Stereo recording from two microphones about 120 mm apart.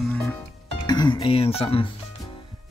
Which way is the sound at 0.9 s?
35° left (ahead or behind).